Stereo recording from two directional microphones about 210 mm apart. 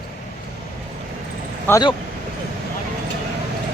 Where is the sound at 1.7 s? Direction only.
15° left (ahead or behind).